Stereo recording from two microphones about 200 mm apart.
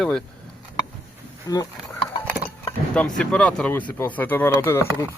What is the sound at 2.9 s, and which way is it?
Speech, 5° left (ahead or behind).